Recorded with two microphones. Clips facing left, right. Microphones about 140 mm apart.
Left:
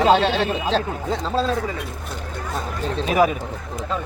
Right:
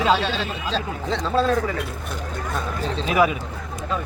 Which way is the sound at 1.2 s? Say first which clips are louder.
Right 3 dB; 30° left (ahead or behind).